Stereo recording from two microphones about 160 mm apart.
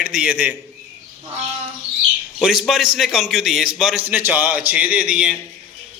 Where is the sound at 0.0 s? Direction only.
5° right (ahead or behind).